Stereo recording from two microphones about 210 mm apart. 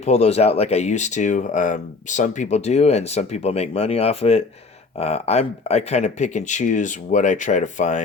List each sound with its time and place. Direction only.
0.0 s speech: 30° left (ahead or behind)